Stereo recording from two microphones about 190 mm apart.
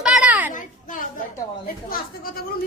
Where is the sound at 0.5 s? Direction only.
45° left (ahead or behind).